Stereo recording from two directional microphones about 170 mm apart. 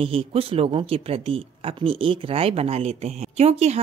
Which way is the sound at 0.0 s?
35° right (ahead or behind).